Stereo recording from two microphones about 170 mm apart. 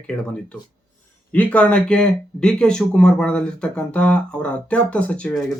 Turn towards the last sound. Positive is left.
turn(degrees=5)  # may be behind; listen again after turning